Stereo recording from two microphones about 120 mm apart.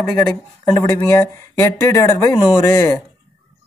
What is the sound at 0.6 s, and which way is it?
Speech, 30° left (ahead or behind).